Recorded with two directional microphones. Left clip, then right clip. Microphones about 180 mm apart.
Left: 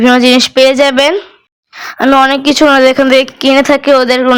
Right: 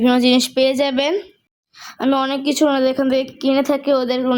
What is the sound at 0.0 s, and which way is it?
Speech, 10° left (ahead or behind).